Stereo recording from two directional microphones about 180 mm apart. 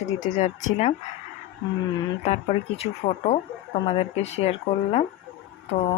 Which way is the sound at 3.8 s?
35° left (ahead or behind).